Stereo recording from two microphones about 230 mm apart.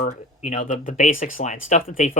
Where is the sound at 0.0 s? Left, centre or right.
Left.